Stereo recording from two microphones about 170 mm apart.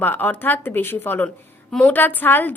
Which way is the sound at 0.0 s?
10° left (ahead or behind).